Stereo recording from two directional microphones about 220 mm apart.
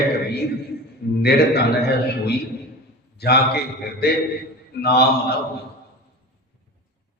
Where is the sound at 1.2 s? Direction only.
45° left (ahead or behind).